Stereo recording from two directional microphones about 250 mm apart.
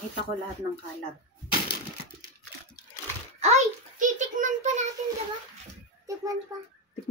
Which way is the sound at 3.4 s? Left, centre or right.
Right.